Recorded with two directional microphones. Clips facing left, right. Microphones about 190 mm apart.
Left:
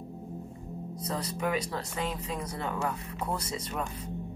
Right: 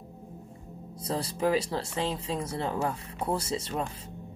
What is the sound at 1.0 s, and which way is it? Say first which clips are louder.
Speech: right 4 dB; 30° right (ahead or behind).